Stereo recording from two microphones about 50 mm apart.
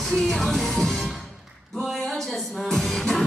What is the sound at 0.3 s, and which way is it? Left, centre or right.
Music, centre.